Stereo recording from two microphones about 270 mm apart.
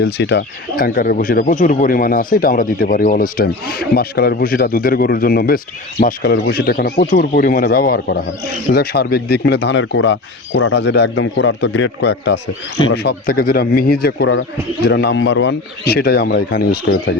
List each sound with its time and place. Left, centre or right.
0.0 s speech: left